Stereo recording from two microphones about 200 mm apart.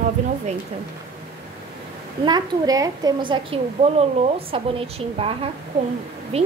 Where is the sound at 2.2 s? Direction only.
20° right (ahead or behind).